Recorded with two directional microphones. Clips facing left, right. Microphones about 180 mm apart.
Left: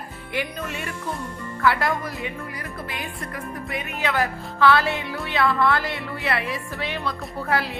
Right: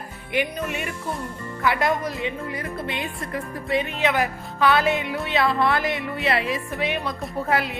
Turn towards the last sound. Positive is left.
turn(degrees=-20)  # may be behind; listen again after turning